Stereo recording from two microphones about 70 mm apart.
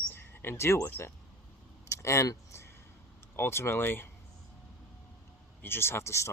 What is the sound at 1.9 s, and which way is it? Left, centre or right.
Vehicle, left.